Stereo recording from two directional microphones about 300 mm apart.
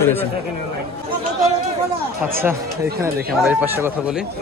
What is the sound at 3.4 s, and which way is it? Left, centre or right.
Speech, centre.